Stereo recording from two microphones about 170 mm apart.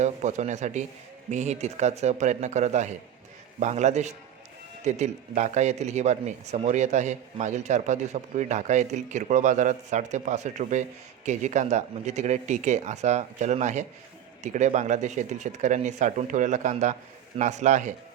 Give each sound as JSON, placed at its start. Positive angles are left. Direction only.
{"t": 0.0, "sound": "speech", "side_deg": -45}